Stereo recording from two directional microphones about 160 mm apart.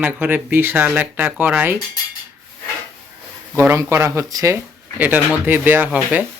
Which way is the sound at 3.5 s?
15° right (ahead or behind).